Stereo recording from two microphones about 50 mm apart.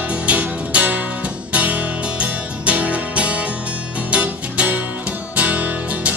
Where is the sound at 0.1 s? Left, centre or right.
Right.